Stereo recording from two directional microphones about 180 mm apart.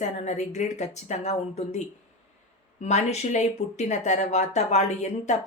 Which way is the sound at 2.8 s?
40° left (ahead or behind).